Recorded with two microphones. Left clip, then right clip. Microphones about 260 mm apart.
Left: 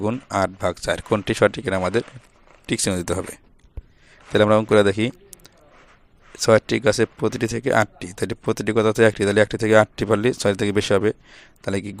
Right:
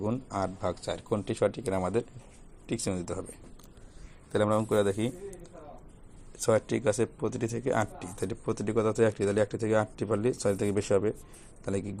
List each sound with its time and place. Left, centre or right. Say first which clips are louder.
0.0 s speech: left 10 dB; left
4.3 s a man's voice: left 11 dB; left